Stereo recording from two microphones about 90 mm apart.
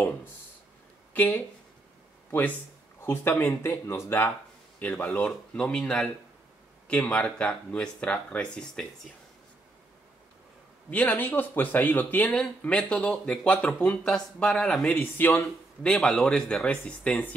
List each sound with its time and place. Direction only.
1.1 s speech: 20° left (ahead or behind)
3.0 s speech: 20° left (ahead or behind)
4.7 s speech: 15° left (ahead or behind)
10.9 s speech: 15° left (ahead or behind)
15.8 s speech: 10° left (ahead or behind)